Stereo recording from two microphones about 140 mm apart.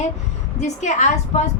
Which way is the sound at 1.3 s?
55° left (ahead or behind).